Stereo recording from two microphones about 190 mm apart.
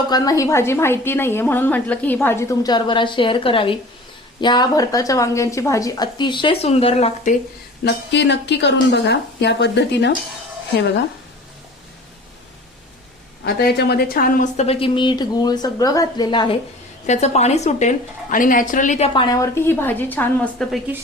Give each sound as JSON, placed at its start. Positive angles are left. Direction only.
{"t": 0.1, "sound": "a woman's voice", "side_deg": 20}
{"t": 8.1, "sound": "speech", "side_deg": 65}
{"t": 13.4, "sound": "speech", "side_deg": 60}
{"t": 17.1, "sound": "a woman's voice", "side_deg": 35}